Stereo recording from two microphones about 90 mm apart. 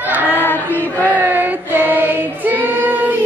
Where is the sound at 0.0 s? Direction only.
20° right (ahead or behind).